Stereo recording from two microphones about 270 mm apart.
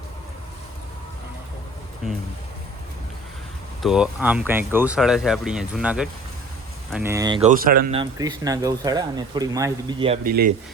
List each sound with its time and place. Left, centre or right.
3.8 s speech: centre
7.6 s speech: right
7.9 s speech: centre
10.2 s speech: right